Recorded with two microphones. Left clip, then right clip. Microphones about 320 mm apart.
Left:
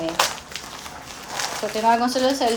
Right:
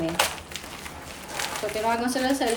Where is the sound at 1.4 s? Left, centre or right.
Centre.